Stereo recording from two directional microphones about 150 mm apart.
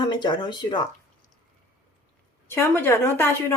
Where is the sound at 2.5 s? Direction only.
15° left (ahead or behind).